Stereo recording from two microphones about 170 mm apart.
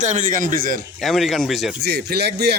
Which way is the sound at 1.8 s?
70° right (ahead or behind).